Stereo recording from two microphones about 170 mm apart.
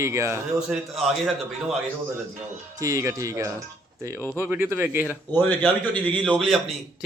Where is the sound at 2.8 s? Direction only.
15° right (ahead or behind).